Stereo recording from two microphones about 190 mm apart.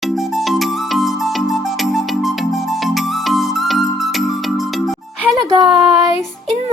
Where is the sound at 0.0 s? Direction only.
Centre (ahead or behind).